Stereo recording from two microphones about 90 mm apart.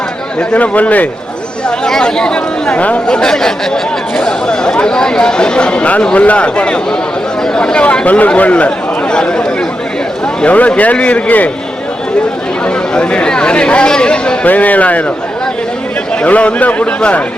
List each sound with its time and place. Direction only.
0.5 s speech: 15° left (ahead or behind)
12.6 s speech: 10° left (ahead or behind)
16.2 s speech: 15° left (ahead or behind)